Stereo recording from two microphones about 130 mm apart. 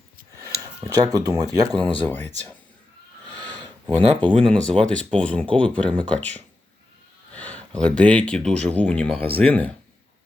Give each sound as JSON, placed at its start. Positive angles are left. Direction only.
{"t": 0.9, "sound": "speech", "side_deg": -30}
{"t": 2.0, "sound": "speech", "side_deg": 15}
{"t": 3.4, "sound": "a sound", "side_deg": 10}
{"t": 4.4, "sound": "speech", "side_deg": 5}